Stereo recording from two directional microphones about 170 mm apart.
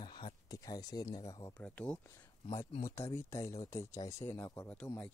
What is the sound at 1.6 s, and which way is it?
Speech, 5° left (ahead or behind).